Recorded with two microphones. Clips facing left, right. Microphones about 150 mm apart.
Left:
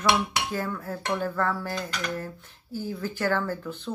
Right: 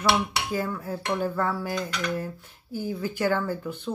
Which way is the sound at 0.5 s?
10° right (ahead or behind).